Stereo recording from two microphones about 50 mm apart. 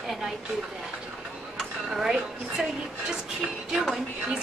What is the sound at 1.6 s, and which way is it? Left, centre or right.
Speech, centre.